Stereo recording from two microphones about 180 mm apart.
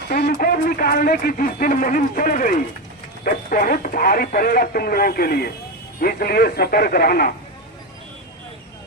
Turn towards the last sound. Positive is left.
turn(degrees=60)  # may be behind; listen again after turning